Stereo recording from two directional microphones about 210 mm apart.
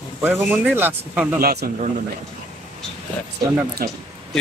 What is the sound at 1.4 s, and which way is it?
Speech, 45° right (ahead or behind).